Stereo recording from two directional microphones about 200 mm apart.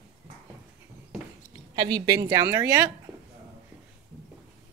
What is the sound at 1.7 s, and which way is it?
A woman's voice, 20° right (ahead or behind).